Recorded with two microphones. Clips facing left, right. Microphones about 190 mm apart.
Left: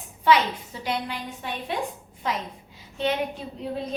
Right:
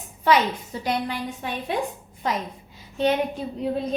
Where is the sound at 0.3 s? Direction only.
45° right (ahead or behind).